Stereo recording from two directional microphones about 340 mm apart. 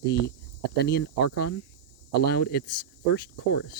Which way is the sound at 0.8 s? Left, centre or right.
Left.